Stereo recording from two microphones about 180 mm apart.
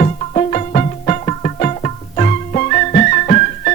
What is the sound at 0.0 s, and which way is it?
Music, 40° left (ahead or behind).